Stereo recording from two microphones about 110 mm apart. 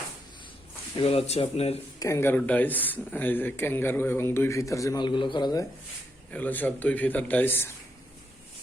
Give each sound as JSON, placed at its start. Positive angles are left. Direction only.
{"t": 0.9, "sound": "speech", "side_deg": 65}
{"t": 2.0, "sound": "a man's voice", "side_deg": 30}
{"t": 2.3, "sound": "a man's voice", "side_deg": 15}
{"t": 4.9, "sound": "a man's voice", "side_deg": 45}
{"t": 6.3, "sound": "a man's voice", "side_deg": 15}